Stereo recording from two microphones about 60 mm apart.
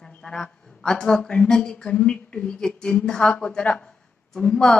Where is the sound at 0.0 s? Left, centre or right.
Centre.